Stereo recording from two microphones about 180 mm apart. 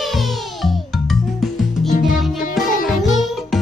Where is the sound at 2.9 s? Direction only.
Centre (ahead or behind).